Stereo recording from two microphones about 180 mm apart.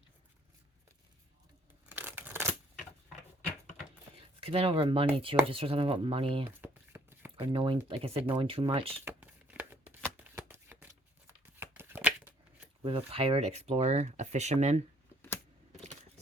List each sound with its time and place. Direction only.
1.9 s scissors: 10° right (ahead or behind)
4.4 s speech: 30° right (ahead or behind)
6.6 s shuffling cards: 10° right (ahead or behind)
7.3 s speech: 30° right (ahead or behind)
9.0 s shuffling cards: 10° right (ahead or behind)
12.8 s speech: 30° right (ahead or behind)